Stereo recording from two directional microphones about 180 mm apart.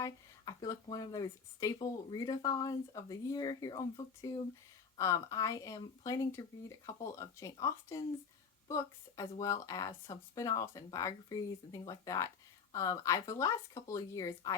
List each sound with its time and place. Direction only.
0.0 s speech: 20° left (ahead or behind)